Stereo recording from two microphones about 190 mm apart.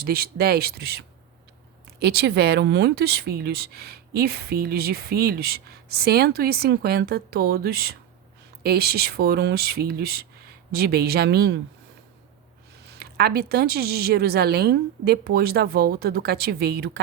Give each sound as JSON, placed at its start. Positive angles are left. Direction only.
{"t": 0.0, "sound": "speech", "side_deg": -55}
{"t": 12.9, "sound": "speech", "side_deg": -55}